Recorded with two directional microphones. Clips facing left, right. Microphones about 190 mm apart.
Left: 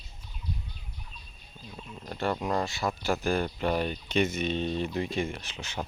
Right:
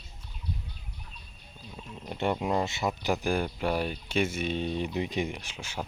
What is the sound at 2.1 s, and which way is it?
Speech, 20° right (ahead or behind).